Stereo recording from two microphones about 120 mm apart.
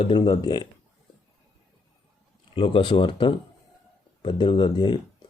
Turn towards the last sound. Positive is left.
turn(degrees=40)  # may be behind; listen again after turning